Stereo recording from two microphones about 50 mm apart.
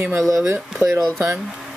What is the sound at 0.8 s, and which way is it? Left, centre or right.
Speech, right.